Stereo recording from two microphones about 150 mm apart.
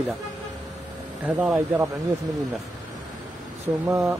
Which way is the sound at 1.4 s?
10° right (ahead or behind).